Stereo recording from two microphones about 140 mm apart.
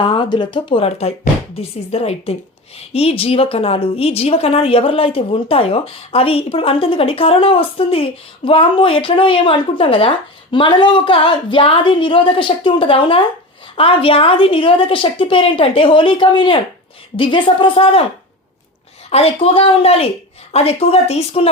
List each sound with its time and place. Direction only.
0.0 s a woman's voice: 35° left (ahead or behind)
19.1 s speech: 45° left (ahead or behind)